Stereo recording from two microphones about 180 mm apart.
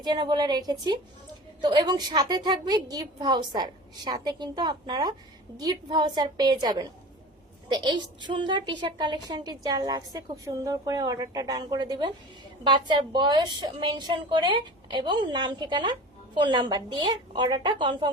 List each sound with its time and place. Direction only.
0.0 s a woman's voice: 25° right (ahead or behind)